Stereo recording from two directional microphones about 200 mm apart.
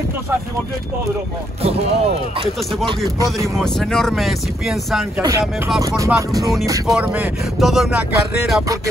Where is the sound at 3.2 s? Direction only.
15° right (ahead or behind).